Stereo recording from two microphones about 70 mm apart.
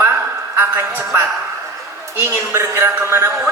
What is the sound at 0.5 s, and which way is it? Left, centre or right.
Speech, right.